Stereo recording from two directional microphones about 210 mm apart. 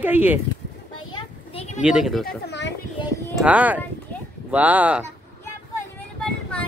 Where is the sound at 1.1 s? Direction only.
30° left (ahead or behind).